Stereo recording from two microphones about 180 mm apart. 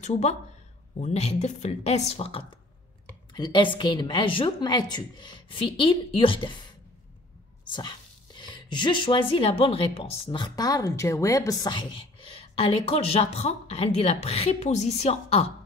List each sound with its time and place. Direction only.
0.0 s a woman's voice: 40° left (ahead or behind)